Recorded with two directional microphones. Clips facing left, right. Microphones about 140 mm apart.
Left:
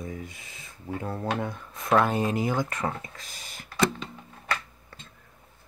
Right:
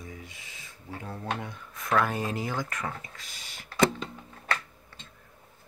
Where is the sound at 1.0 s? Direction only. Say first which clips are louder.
Left 5 dB; 50° left (ahead or behind).